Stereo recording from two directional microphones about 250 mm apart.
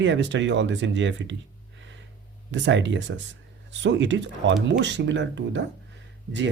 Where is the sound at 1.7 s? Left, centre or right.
Right.